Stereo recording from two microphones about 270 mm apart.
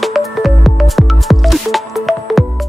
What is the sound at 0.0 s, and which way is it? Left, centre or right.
Music, centre.